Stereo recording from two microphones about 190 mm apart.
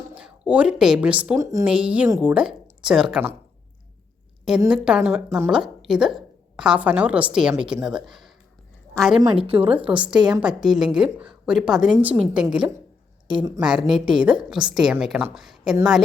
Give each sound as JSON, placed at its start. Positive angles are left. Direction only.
{"t": 0.1, "sound": "a woman's voice", "side_deg": -5}
{"t": 2.3, "sound": "speech", "side_deg": -5}
{"t": 4.7, "sound": "a woman's voice", "side_deg": -5}
{"t": 9.2, "sound": "a woman's voice", "side_deg": -30}
{"t": 9.7, "sound": "a woman's voice", "side_deg": -5}